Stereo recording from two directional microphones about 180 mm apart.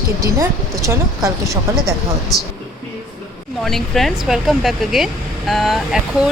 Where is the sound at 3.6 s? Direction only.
Centre (ahead or behind).